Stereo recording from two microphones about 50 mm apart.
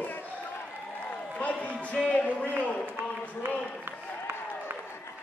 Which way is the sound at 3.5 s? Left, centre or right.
Left.